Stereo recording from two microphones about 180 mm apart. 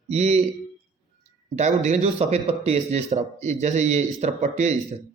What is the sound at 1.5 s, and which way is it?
A man's voice, 40° right (ahead or behind).